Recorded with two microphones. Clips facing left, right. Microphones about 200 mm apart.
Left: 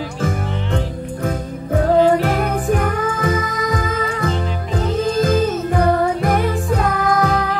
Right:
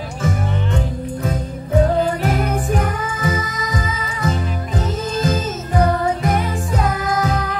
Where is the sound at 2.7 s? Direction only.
55° left (ahead or behind).